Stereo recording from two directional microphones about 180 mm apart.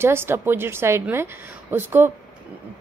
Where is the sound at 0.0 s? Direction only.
15° right (ahead or behind).